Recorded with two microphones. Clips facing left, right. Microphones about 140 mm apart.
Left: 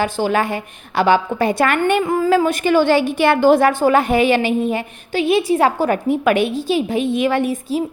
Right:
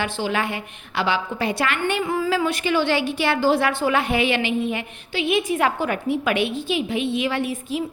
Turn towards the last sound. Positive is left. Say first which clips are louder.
# left 6 dB
turn(degrees=40)  # may be behind; listen again after turning